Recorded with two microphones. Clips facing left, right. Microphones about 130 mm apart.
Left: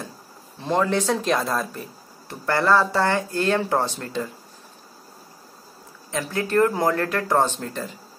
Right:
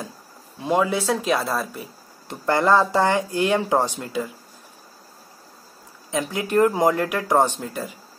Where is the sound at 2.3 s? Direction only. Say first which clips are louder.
Right 2 dB; 20° right (ahead or behind).